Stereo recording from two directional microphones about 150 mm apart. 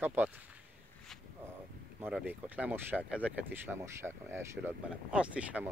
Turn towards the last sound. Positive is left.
turn(degrees=-10)  # may be behind; listen again after turning